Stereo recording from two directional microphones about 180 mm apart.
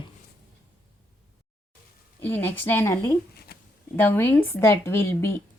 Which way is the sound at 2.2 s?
10° left (ahead or behind).